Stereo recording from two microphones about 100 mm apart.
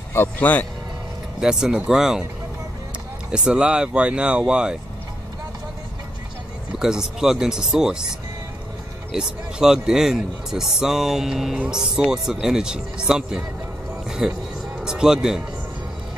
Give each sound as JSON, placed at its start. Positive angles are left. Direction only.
{"t": 0.1, "sound": "a man's voice", "side_deg": 20}
{"t": 1.4, "sound": "speech", "side_deg": -5}
{"t": 3.3, "sound": "speech", "side_deg": -10}
{"t": 6.8, "sound": "speech", "side_deg": -5}
{"t": 9.1, "sound": "speech", "side_deg": -5}